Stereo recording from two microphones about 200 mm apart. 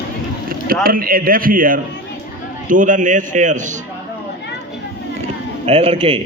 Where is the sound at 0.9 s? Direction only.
45° right (ahead or behind).